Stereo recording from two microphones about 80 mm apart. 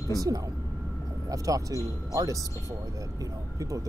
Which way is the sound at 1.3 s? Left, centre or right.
Right.